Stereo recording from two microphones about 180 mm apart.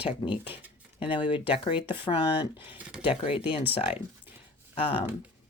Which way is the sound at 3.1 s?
30° left (ahead or behind).